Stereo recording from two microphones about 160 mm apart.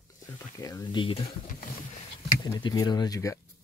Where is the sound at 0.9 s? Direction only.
30° left (ahead or behind).